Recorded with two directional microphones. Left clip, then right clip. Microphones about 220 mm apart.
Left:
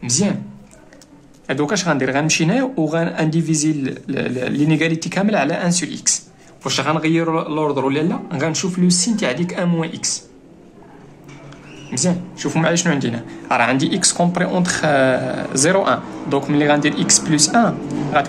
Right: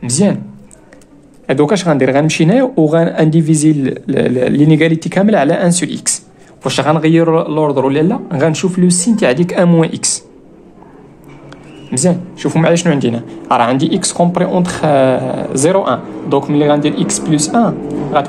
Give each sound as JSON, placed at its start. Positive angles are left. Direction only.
{"t": 0.0, "sound": "speech", "side_deg": -30}
{"t": 1.5, "sound": "a man's voice", "side_deg": -20}
{"t": 11.9, "sound": "speech", "side_deg": -35}